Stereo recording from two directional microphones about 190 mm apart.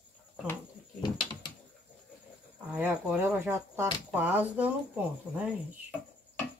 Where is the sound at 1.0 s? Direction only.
25° left (ahead or behind).